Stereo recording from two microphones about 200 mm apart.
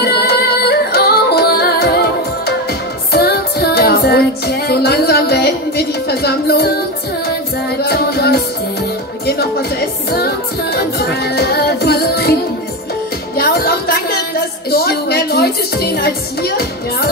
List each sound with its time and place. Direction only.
0.0 s music: 55° left (ahead or behind)
7.8 s music: 50° left (ahead or behind)
13.4 s a sound: 50° left (ahead or behind)